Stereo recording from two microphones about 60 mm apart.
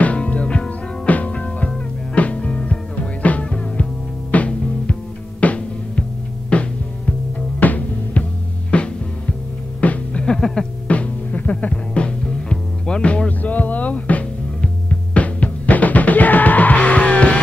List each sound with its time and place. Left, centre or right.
0.0 s music: left
10.9 s music: left